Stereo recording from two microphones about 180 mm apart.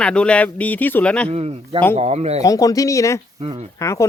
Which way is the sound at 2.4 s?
20° left (ahead or behind).